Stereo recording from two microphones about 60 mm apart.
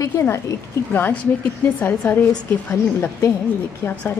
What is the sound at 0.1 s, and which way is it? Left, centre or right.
Speech, left.